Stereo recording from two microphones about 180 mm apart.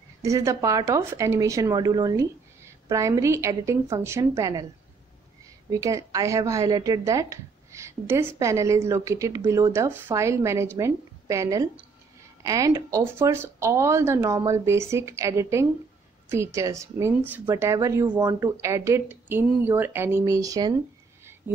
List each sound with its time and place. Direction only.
0.2 s a woman's voice: 15° right (ahead or behind)
5.7 s a woman's voice: 20° right (ahead or behind)